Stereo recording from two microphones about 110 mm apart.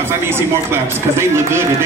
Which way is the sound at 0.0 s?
20° right (ahead or behind).